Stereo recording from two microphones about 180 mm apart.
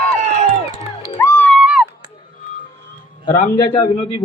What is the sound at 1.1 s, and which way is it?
Music, 15° left (ahead or behind).